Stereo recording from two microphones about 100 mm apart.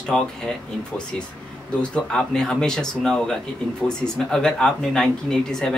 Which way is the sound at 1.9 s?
10° left (ahead or behind).